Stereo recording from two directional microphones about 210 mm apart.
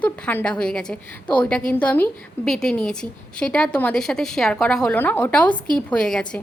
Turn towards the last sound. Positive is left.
turn(degrees=5)  # may be behind; listen again after turning